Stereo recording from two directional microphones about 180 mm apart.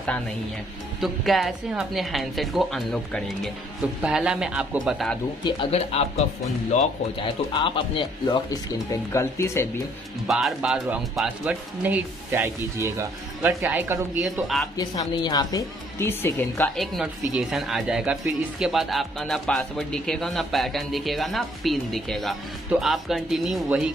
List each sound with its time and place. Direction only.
1.0 s a woman's voice: centre (ahead or behind)
5.4 s speech: 30° left (ahead or behind)
7.2 s speech: 30° left (ahead or behind)
9.1 s speech: 15° left (ahead or behind)
10.2 s speech: centre (ahead or behind)
14.8 s a woman's voice: 20° left (ahead or behind); by 23.9 s 5° right (ahead or behind)